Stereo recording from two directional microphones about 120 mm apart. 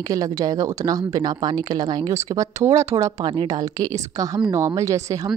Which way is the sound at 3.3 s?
40° right (ahead or behind).